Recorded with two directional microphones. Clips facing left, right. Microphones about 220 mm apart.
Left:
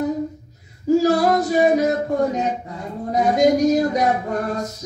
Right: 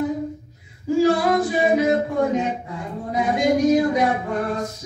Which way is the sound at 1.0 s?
40° left (ahead or behind).